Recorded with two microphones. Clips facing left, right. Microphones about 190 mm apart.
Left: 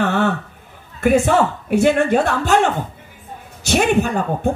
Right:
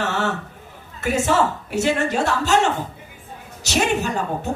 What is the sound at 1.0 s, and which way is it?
A woman's voice, 55° left (ahead or behind).